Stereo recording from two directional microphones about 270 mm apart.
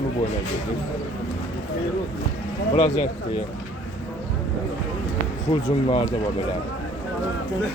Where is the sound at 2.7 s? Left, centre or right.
Left.